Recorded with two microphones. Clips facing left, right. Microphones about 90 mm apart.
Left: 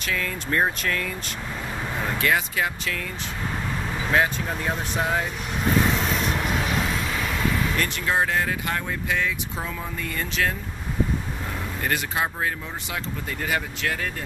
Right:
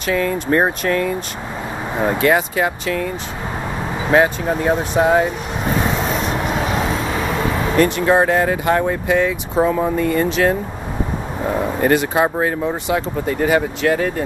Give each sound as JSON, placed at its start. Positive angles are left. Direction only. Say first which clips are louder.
{"t": 0.0, "sound": "speech", "louder": "right 10 dB", "side_deg": -30}
{"t": 4.0, "sound": "vehicle", "louder": "right 8 dB", "side_deg": -30}
{"t": 9.6, "sound": "speech", "louder": "right 15 dB", "side_deg": -40}
{"t": 10.0, "sound": "speech", "louder": "right 8 dB", "side_deg": -30}
{"t": 11.4, "sound": "speech", "louder": "right 12 dB", "side_deg": -40}
{"t": 11.9, "sound": "speech", "louder": "right 8 dB", "side_deg": -25}